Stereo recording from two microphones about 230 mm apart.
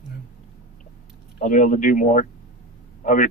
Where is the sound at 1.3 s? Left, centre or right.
Left.